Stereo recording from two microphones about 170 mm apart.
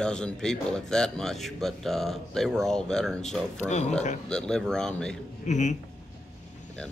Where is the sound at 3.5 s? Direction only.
40° left (ahead or behind).